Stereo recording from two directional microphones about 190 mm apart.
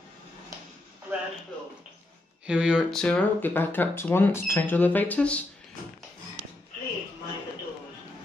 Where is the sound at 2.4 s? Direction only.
5° right (ahead or behind).